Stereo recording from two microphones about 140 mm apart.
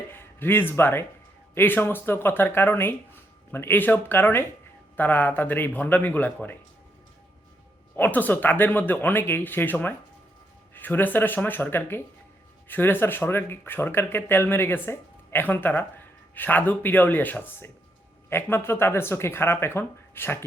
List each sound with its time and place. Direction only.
0.1 s speech: 15° left (ahead or behind)
7.9 s speech: 10° left (ahead or behind)